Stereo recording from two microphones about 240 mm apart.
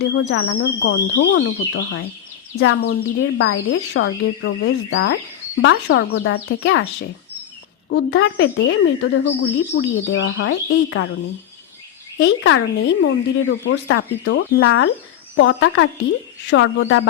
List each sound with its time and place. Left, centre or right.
0.0 s a woman's voice: left
7.9 s a woman's voice: left
12.2 s a woman's voice: left